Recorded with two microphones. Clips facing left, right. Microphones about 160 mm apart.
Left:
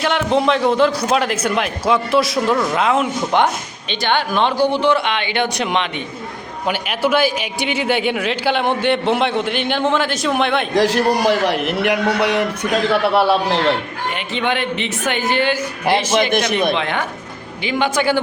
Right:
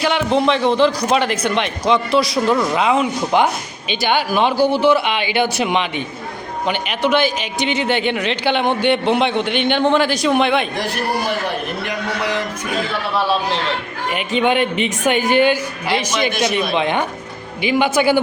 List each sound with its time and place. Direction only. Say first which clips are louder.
0.0 s a man's voice: even; centre (ahead or behind)
6.7 s a man's voice: even; 5° left (ahead or behind)
10.8 s a man's voice: left 6 dB; 90° left; by 13.2 s 65° left (ahead or behind)
14.4 s speech: right 3 dB; 15° right (ahead or behind)
16.7 s speech: right 3 dB; 15° right (ahead or behind)